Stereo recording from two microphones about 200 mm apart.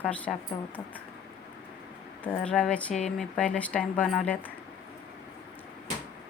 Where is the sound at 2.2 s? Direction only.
5° left (ahead or behind).